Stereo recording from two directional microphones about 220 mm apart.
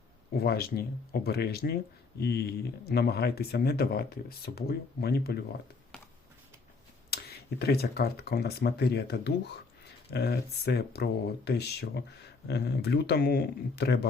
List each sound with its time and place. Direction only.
0.3 s speech: 45° left (ahead or behind)
7.1 s a sound: 45° left (ahead or behind)
7.6 s speech: 45° left (ahead or behind)